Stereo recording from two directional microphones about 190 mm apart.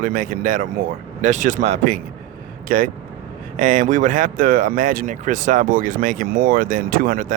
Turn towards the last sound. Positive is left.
turn(degrees=-45)  # may be behind; listen again after turning